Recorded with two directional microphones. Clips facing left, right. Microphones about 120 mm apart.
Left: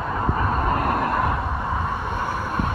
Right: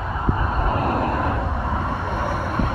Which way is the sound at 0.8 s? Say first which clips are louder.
Right 1 dB; 35° right (ahead or behind).